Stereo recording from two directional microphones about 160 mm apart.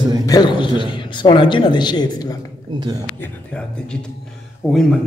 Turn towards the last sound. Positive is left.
turn(degrees=5)  # may be behind; listen again after turning